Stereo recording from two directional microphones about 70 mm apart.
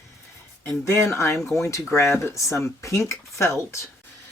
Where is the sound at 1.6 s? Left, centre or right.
Left.